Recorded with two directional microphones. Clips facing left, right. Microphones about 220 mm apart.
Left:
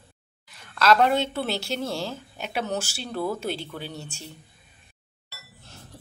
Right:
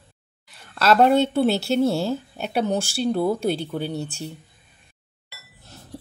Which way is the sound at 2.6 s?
30° right (ahead or behind).